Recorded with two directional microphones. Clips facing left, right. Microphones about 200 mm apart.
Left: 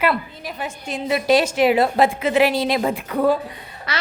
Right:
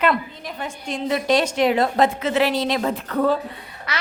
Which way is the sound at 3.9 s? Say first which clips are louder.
Left 2 dB; 30° left (ahead or behind).